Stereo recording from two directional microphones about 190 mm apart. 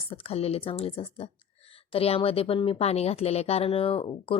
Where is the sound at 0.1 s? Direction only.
30° left (ahead or behind).